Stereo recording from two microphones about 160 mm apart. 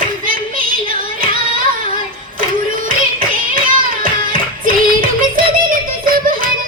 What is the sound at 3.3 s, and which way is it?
Music, 60° right (ahead or behind).